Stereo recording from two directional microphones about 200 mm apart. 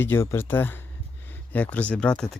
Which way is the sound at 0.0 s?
10° left (ahead or behind).